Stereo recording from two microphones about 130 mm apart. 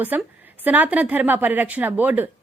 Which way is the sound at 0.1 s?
15° right (ahead or behind).